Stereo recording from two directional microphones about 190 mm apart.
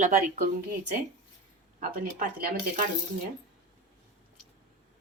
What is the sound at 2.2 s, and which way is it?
Speech, 45° right (ahead or behind).